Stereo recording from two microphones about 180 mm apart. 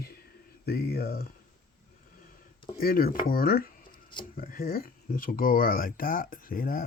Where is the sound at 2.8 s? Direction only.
50° left (ahead or behind).